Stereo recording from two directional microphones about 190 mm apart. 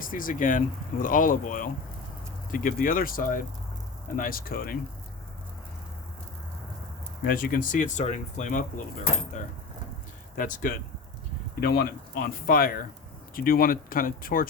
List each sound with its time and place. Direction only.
0.0 s speech: 45° left (ahead or behind)
7.3 s speech: 50° left (ahead or behind)
10.3 s speech: 45° left (ahead or behind)